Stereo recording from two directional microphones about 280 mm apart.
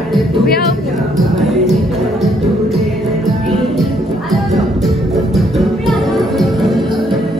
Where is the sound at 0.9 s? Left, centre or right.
Centre.